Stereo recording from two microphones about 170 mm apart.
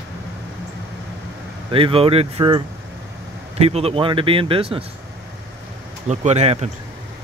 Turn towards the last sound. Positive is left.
turn(degrees=-40)  # may be behind; listen again after turning